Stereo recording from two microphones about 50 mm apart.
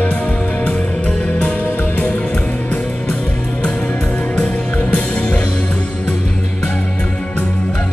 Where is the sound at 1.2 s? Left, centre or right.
Left.